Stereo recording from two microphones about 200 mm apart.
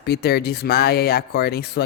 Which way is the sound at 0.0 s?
55° left (ahead or behind).